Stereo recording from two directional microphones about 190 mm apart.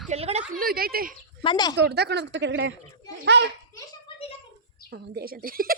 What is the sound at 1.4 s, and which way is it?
Speech, 25° left (ahead or behind).